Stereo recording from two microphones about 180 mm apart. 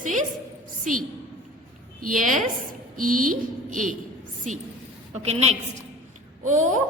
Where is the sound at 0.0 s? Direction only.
45° right (ahead or behind).